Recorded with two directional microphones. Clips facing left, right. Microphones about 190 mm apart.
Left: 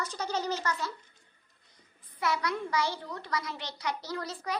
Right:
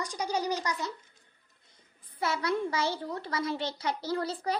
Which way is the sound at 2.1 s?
25° right (ahead or behind).